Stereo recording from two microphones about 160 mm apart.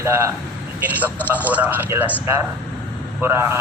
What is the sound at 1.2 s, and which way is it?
Speech, 10° right (ahead or behind).